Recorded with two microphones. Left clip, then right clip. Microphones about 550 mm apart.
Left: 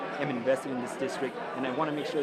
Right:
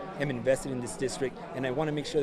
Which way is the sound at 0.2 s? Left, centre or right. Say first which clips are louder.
Right 1 dB; right.